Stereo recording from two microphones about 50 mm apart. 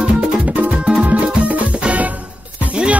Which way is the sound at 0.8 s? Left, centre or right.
Right.